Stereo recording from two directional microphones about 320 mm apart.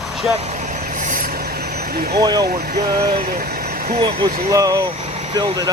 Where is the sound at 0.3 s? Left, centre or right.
Right.